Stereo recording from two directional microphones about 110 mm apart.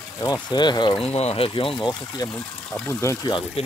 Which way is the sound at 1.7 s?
40° left (ahead or behind).